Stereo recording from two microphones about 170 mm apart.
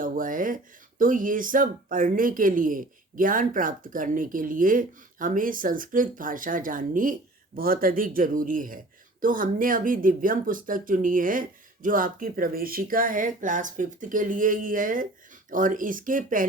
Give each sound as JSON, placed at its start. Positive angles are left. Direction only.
{"t": 0.0, "sound": "speech", "side_deg": -55}